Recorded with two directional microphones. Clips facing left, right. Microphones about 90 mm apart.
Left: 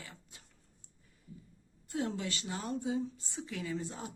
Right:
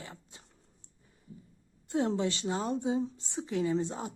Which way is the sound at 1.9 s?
30° right (ahead or behind).